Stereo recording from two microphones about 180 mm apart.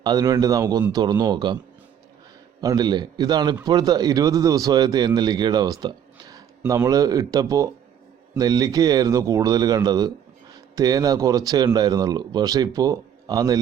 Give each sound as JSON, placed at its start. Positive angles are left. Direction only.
{"t": 0.0, "sound": "a man's voice", "side_deg": -20}
{"t": 2.6, "sound": "a man's voice", "side_deg": -20}